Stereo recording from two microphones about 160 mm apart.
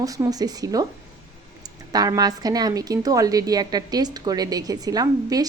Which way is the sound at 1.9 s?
25° right (ahead or behind).